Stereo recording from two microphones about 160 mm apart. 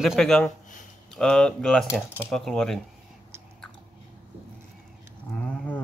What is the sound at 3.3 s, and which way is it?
Chewing, 15° right (ahead or behind).